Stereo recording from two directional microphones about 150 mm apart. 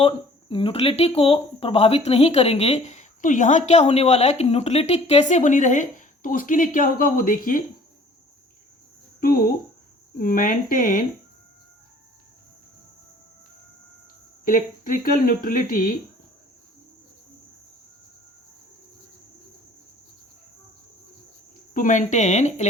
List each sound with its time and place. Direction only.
0.0 s speech: 35° left (ahead or behind); by 7.6 s 65° left (ahead or behind)
10.2 s speech: 65° left (ahead or behind)
14.4 s speech: 65° left (ahead or behind)
21.7 s speech: 60° left (ahead or behind)